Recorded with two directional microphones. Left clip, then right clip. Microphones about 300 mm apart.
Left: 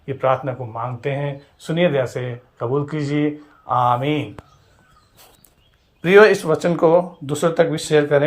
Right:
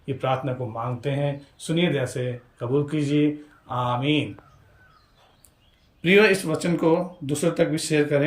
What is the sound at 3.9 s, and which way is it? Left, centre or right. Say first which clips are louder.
Speech: left 5 dB; left.